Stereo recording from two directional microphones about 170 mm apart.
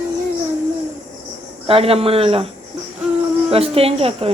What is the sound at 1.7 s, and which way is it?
Speech, 35° right (ahead or behind).